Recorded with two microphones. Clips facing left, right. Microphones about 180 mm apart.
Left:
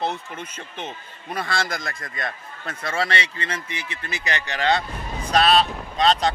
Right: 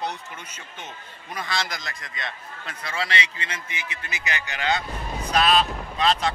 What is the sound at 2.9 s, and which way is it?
A man's voice, 30° left (ahead or behind).